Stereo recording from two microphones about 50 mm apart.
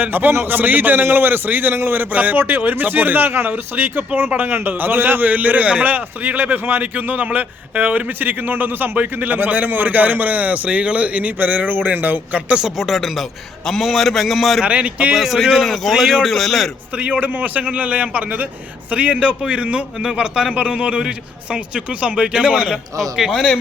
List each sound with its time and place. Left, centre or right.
0.0 s a man's voice: right
5.3 s speech: right
12.6 s a man's voice: centre
14.6 s a man's voice: right
15.1 s a man's voice: centre
17.0 s a man's voice: right; by 23.3 s centre
23.3 s a man's voice: centre